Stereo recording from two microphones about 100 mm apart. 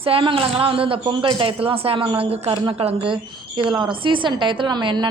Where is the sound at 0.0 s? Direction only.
65° right (ahead or behind).